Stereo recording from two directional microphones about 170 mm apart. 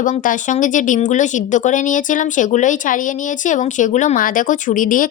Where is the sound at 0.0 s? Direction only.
50° left (ahead or behind).